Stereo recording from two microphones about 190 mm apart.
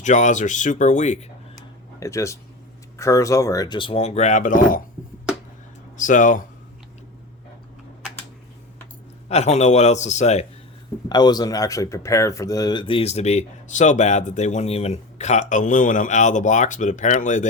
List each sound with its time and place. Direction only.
0.0 s speech: 40° left (ahead or behind)
2.0 s speech: 15° left (ahead or behind); by 4.8 s 45° left (ahead or behind)
6.0 s speech: 40° left (ahead or behind)
9.3 s speech: 35° left (ahead or behind)
11.1 s speech: 20° left (ahead or behind); by 17.4 s 40° left (ahead or behind)